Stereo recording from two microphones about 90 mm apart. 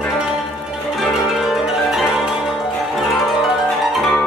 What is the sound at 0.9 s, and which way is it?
Music, 5° right (ahead or behind).